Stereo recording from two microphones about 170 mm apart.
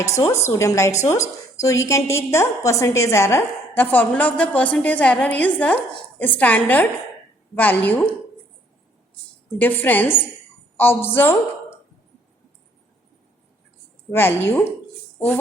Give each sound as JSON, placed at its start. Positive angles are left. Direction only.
{"t": 0.3, "sound": "a woman's voice", "side_deg": 20}
{"t": 9.6, "sound": "a woman's voice", "side_deg": 10}
{"t": 14.1, "sound": "a woman's voice", "side_deg": 15}